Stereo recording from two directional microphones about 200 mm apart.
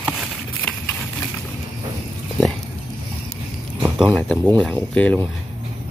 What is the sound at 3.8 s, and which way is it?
Speech, 5° right (ahead or behind).